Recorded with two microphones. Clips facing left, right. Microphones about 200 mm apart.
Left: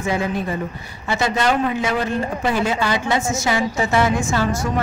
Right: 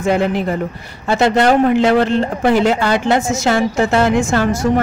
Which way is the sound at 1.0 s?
60° right (ahead or behind).